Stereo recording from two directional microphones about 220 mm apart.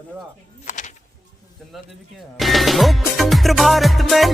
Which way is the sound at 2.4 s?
Centre (ahead or behind).